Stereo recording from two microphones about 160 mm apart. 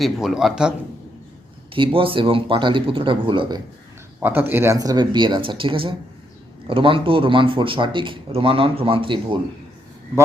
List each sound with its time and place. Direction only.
0.0 s speech: centre (ahead or behind)
1.7 s a man's voice: 35° right (ahead or behind)
4.2 s a man's voice: 10° right (ahead or behind); by 9.4 s 30° right (ahead or behind)